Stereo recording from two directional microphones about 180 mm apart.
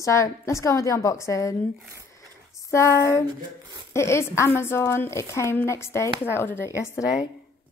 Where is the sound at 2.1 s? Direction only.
15° left (ahead or behind).